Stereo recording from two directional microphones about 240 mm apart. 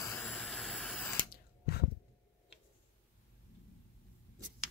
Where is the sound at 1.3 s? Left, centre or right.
Left.